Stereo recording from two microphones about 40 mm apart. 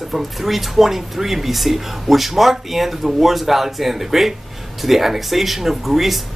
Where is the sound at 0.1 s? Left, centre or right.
Centre.